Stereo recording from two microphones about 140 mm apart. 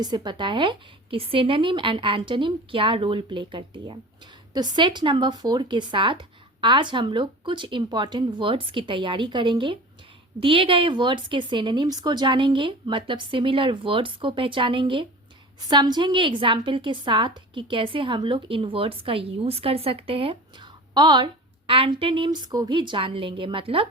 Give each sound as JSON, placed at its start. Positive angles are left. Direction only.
{"t": 0.0, "sound": "speech", "side_deg": -30}